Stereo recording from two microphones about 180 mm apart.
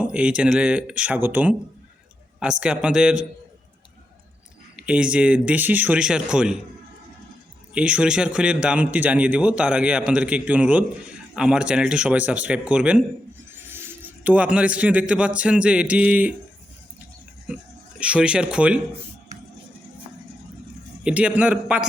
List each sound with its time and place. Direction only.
0.0 s a man's voice: 5° right (ahead or behind)
4.9 s speech: 5° right (ahead or behind)
7.7 s a man's voice: 5° right (ahead or behind)
18.0 s speech: 5° right (ahead or behind)
21.0 s a man's voice: 5° right (ahead or behind)